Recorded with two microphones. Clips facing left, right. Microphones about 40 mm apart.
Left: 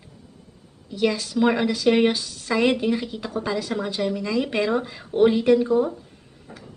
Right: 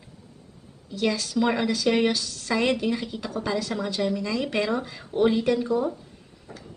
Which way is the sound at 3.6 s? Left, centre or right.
Left.